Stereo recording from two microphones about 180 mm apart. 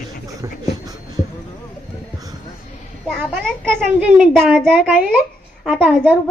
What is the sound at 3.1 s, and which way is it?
Speech, centre (ahead or behind).